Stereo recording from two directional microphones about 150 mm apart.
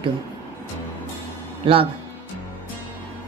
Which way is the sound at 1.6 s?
35° right (ahead or behind).